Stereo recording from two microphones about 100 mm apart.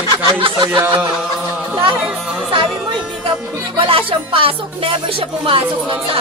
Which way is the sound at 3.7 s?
65° right (ahead or behind).